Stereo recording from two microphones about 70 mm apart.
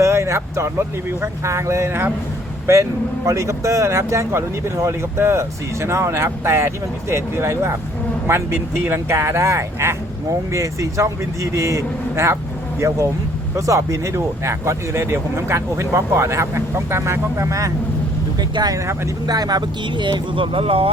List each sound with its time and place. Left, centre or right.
0.0 s speech: right
18.5 s speech: right